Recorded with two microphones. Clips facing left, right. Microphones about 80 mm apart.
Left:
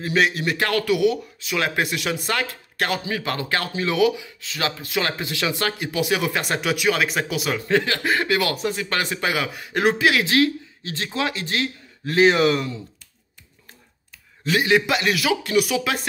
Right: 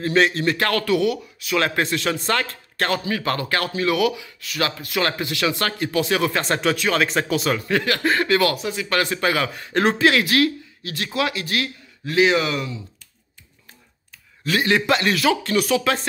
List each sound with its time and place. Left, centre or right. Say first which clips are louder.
0.0 s speech: right 2 dB; centre
7.6 s speech: even; left
8.6 s speech: left 2 dB; left
8.9 s speech: right 6 dB; centre
10.2 s speech: even; left
12.1 s speech: left 2 dB; left
14.4 s speech: left 1 dB; centre